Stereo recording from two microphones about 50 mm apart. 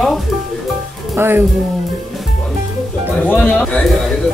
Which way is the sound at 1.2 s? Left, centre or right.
Right.